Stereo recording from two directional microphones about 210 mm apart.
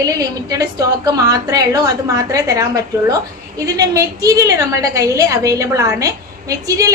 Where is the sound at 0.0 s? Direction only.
15° right (ahead or behind).